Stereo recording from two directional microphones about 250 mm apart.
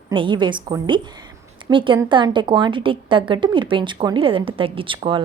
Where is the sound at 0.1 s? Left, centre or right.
Centre.